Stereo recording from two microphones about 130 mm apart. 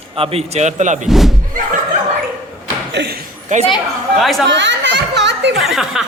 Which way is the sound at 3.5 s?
70° right (ahead or behind).